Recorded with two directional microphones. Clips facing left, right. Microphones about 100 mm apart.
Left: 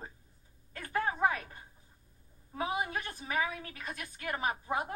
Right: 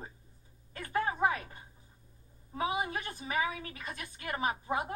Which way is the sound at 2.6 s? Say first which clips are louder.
Right 1 dB; 10° right (ahead or behind).